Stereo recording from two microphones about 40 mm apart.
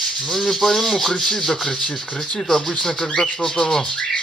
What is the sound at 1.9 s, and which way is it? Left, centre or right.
Speech, left.